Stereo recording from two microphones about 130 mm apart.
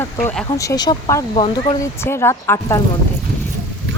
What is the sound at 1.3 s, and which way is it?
Speech, 40° left (ahead or behind).